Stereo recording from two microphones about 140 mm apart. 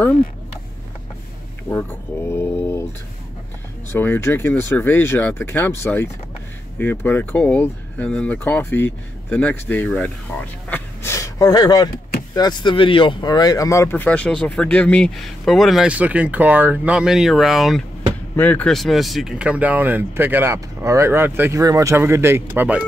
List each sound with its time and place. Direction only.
1.7 s a sound: 15° left (ahead or behind)
3.9 s speech: 15° left (ahead or behind)
10.7 s vehicle: 20° left (ahead or behind)
12.4 s speech: 30° left (ahead or behind); by 17.8 s centre (ahead or behind)
18.3 s speech: 10° left (ahead or behind); by 22.8 s 15° right (ahead or behind)